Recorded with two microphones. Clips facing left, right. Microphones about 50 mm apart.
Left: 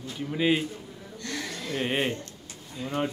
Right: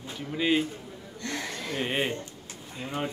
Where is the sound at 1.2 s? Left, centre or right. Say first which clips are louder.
Right 1 dB; right.